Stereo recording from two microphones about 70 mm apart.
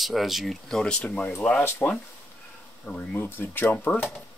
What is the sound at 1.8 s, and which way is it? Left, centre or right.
Speech, left.